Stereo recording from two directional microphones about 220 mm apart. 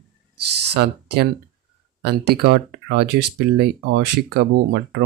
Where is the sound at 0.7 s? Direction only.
45° right (ahead or behind).